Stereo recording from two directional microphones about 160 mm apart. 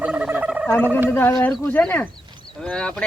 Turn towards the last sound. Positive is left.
turn(degrees=5)  # may be behind; listen again after turning